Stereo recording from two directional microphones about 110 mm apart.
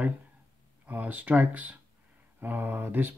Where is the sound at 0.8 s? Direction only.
15° right (ahead or behind).